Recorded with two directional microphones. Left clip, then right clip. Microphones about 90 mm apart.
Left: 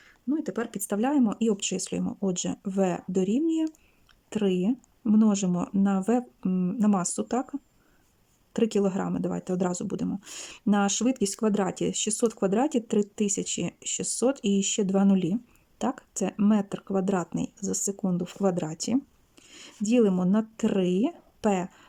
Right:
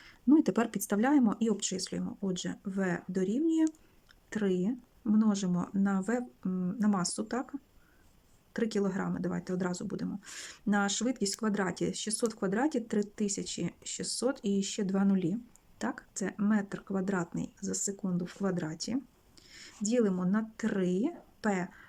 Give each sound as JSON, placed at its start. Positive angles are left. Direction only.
{"t": 0.3, "sound": "speech", "side_deg": -20}
{"t": 0.5, "sound": "speech", "side_deg": -5}
{"t": 0.9, "sound": "speech", "side_deg": 10}
{"t": 1.5, "sound": "speech", "side_deg": 30}
{"t": 3.4, "sound": "speech", "side_deg": 15}
{"t": 4.3, "sound": "speech", "side_deg": 25}